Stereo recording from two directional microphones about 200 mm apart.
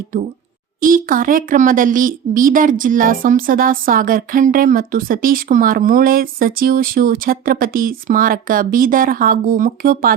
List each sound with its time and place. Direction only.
0.8 s speech: 45° right (ahead or behind)